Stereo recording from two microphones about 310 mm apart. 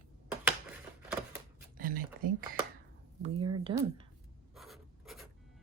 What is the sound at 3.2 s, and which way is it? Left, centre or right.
Speech, centre.